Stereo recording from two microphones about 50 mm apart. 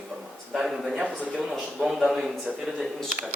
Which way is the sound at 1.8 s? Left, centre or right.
Centre.